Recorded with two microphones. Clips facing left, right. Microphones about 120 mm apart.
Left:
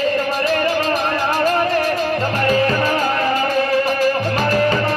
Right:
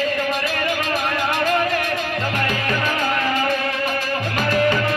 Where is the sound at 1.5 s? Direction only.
35° left (ahead or behind).